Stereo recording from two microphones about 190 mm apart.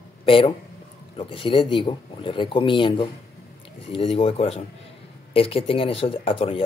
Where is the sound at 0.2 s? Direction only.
30° left (ahead or behind).